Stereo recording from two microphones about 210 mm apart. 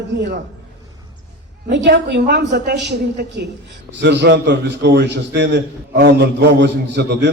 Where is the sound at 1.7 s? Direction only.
55° right (ahead or behind).